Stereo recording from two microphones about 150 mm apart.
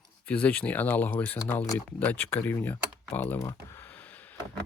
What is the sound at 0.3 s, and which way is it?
Speech, 10° left (ahead or behind).